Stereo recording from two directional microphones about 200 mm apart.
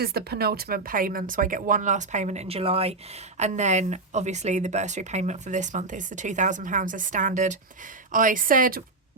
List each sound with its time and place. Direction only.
0.0 s speech: 50° right (ahead or behind)